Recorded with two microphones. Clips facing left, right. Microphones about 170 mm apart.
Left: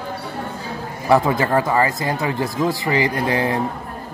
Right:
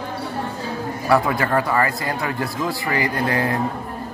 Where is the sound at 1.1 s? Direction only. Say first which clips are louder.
Left 2 dB; 20° left (ahead or behind).